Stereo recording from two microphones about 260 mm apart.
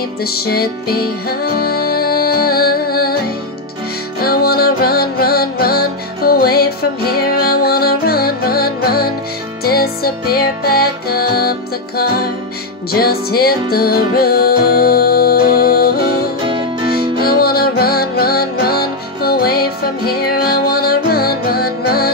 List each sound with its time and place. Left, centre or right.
0.2 s music: left
4.2 s music: left
12.9 s music: left
16.4 s music: centre
17.2 s music: left